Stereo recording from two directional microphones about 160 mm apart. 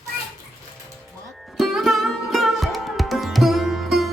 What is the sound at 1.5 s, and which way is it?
Music, centre (ahead or behind).